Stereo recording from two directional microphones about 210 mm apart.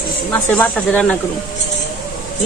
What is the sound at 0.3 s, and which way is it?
Speech, 5° left (ahead or behind).